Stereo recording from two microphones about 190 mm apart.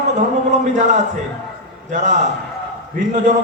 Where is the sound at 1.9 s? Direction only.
40° right (ahead or behind).